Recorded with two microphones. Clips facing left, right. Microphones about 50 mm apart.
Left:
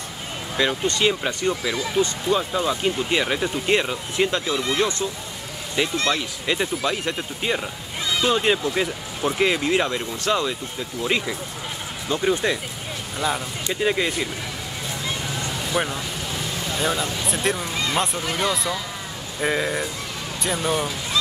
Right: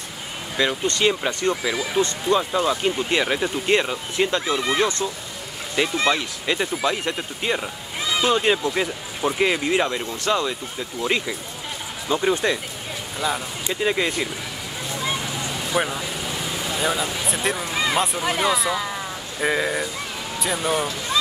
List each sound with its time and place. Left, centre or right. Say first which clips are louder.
0.6 s speech: even; centre
1.0 s speech: right 2 dB; centre
2.0 s speech: right 1 dB; centre
4.5 s speech: right 1 dB; centre
12.1 s speech: right 1 dB; centre
15.7 s speech: right 2 dB; centre